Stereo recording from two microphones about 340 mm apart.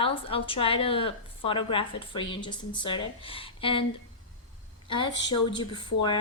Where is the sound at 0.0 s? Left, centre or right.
Centre.